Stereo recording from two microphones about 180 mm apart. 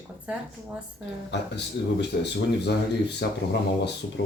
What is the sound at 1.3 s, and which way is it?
Speech, 70° left (ahead or behind).